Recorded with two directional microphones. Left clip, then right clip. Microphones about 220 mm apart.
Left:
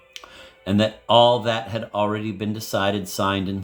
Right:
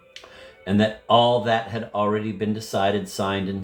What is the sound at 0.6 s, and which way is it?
Speech, 50° left (ahead or behind).